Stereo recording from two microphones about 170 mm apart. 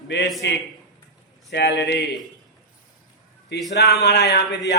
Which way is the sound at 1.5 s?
90° left.